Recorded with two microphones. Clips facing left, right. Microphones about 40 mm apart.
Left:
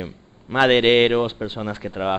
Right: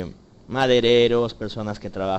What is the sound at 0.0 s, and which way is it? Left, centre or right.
A man's voice, left.